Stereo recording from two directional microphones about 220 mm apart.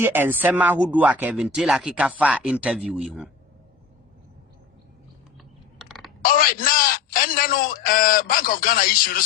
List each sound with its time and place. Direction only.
0.0 s speech: 10° right (ahead or behind)
5.8 s a sound: centre (ahead or behind)
6.2 s a man's voice: 40° left (ahead or behind)